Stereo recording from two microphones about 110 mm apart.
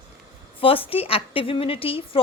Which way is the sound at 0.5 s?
60° left (ahead or behind).